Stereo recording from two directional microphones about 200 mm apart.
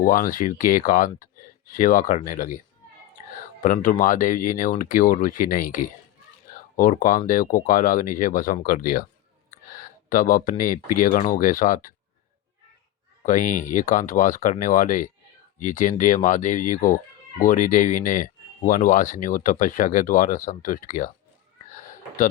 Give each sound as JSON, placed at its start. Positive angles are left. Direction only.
{"t": 0.0, "sound": "speech", "side_deg": 45}
{"t": 6.5, "sound": "a sound", "side_deg": 45}
{"t": 7.3, "sound": "speech", "side_deg": 45}
{"t": 10.1, "sound": "speech", "side_deg": 40}
{"t": 13.2, "sound": "speech", "side_deg": 40}